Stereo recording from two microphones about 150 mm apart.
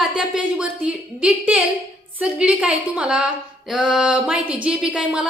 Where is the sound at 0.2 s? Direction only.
5° right (ahead or behind).